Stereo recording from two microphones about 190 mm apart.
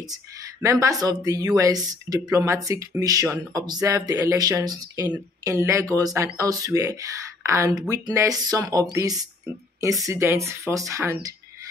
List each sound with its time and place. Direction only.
0.1 s speech: 15° right (ahead or behind)